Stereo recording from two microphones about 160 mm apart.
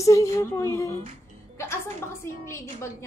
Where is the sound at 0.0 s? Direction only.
20° left (ahead or behind).